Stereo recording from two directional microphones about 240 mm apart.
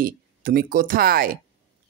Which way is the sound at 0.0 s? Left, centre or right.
Right.